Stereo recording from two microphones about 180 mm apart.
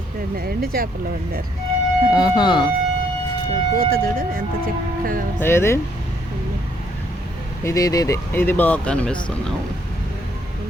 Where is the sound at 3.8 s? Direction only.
55° right (ahead or behind).